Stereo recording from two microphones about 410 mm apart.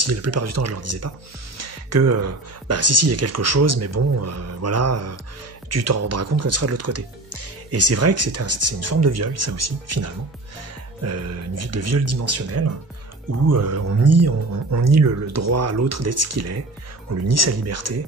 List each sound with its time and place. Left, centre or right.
0.0 s speech: right